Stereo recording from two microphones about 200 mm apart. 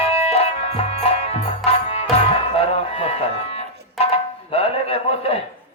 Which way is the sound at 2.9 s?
30° left (ahead or behind).